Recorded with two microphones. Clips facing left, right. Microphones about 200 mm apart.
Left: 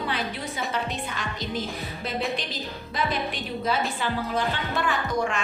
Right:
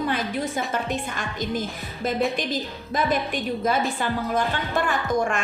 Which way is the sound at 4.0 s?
45° right (ahead or behind).